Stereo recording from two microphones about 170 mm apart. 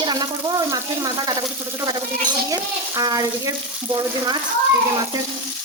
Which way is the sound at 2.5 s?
20° right (ahead or behind).